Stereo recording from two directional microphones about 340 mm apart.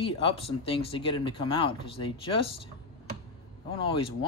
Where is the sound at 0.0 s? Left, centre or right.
Centre.